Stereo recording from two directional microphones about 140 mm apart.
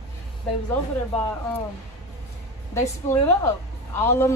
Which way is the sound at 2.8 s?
15° left (ahead or behind).